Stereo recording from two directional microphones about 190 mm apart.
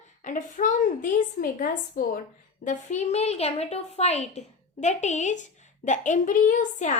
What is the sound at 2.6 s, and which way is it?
A woman's voice, 35° left (ahead or behind).